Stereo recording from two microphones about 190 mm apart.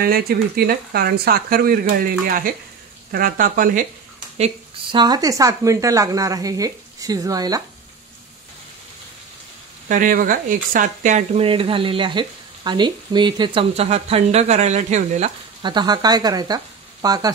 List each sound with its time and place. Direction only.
0.0 s speech: 55° right (ahead or behind)
4.9 s speech: 20° right (ahead or behind)
9.8 s speech: 45° right (ahead or behind)
15.6 s speech: 25° right (ahead or behind)